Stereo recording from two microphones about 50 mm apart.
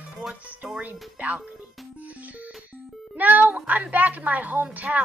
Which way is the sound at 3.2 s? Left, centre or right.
Right.